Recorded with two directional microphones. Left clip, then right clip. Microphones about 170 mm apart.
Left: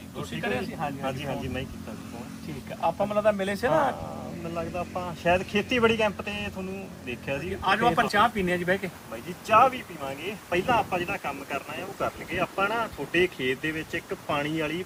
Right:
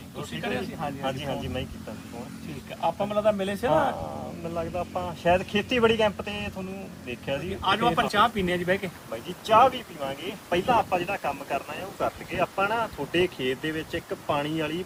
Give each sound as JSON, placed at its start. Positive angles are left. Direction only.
{"t": 0.2, "sound": "speech", "side_deg": -5}
{"t": 2.8, "sound": "speech", "side_deg": 0}
{"t": 4.5, "sound": "speech", "side_deg": -15}
{"t": 7.6, "sound": "speech", "side_deg": 0}
{"t": 9.5, "sound": "speech", "side_deg": -10}